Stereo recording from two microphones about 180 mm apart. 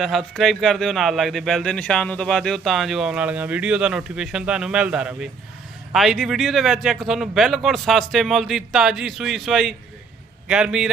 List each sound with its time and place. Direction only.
0.0 s speech: centre (ahead or behind)